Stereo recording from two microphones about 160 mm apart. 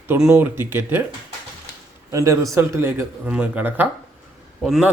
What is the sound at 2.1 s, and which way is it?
A man's voice, 20° right (ahead or behind).